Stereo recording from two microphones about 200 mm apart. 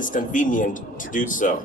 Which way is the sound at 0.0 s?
40° left (ahead or behind).